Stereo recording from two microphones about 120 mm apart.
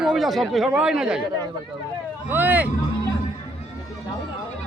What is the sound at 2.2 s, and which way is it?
Speech, 15° right (ahead or behind).